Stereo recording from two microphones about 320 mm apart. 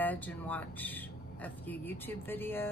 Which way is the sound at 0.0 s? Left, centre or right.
Centre.